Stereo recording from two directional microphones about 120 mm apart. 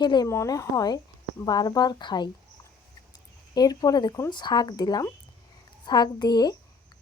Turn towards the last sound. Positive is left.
turn(degrees=35)  # may be behind; listen again after turning